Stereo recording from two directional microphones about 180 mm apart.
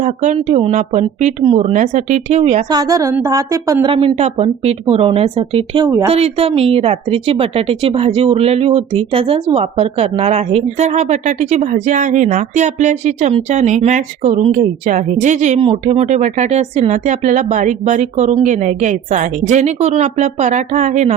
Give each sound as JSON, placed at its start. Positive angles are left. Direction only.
{"t": 0.0, "sound": "speech", "side_deg": -40}
{"t": 2.6, "sound": "a woman's voice", "side_deg": -20}
{"t": 3.9, "sound": "speech", "side_deg": -35}